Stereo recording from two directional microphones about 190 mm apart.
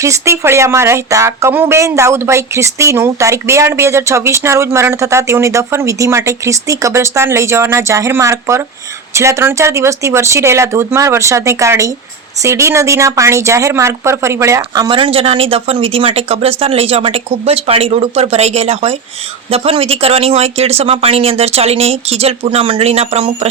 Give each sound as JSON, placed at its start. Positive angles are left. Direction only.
{"t": 0.0, "sound": "speech", "side_deg": -15}